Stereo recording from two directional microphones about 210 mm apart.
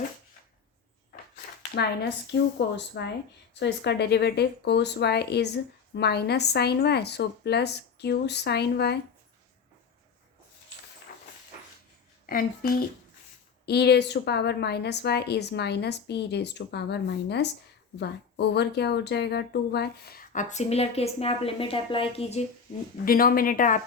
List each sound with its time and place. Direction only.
1.7 s a woman's voice: 55° left (ahead or behind)
12.2 s a woman's voice: 45° left (ahead or behind)
23.0 s a woman's voice: 45° left (ahead or behind)